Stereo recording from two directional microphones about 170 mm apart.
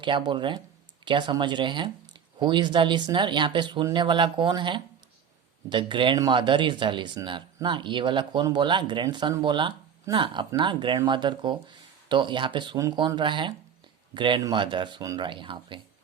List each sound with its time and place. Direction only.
0.0 s speech: 30° right (ahead or behind)